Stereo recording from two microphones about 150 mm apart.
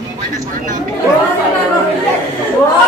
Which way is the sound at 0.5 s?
60° right (ahead or behind).